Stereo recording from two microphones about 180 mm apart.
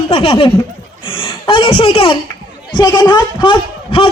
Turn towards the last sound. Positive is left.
turn(degrees=30)  # may be behind; listen again after turning